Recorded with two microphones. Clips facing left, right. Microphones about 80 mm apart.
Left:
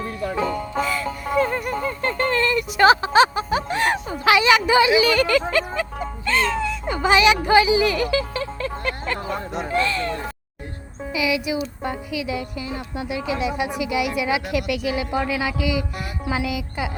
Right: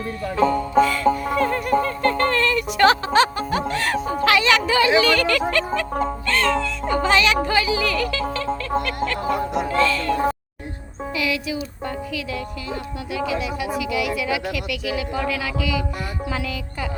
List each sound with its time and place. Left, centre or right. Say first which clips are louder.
0.9 s music: right 5 dB; centre
1.5 s speech: right 4 dB; centre
3.7 s music: left 2 dB; centre
4.2 s speech: left 2 dB; centre
11.1 s speech: left 2 dB; centre